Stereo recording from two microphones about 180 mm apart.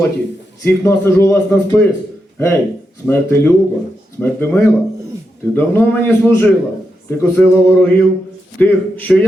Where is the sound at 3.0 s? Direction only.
15° left (ahead or behind).